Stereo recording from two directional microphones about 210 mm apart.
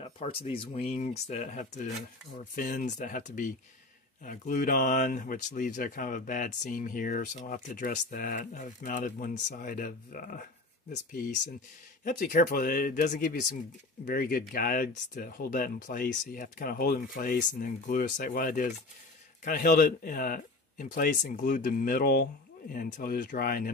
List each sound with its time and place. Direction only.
0.0 s speech: 25° left (ahead or behind); by 23.7 s 45° left (ahead or behind)